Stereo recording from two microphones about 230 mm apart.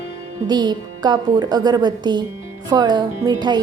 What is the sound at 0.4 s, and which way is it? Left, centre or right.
A woman's voice, centre.